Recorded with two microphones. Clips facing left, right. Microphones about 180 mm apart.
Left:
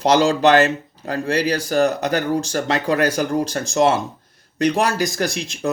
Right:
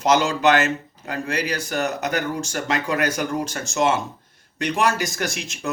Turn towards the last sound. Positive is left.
turn(degrees=35)  # may be behind; listen again after turning